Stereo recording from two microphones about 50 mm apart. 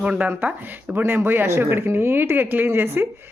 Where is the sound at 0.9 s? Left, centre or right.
Right.